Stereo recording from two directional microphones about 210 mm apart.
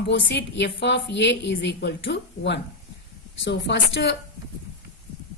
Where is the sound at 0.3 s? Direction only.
55° left (ahead or behind).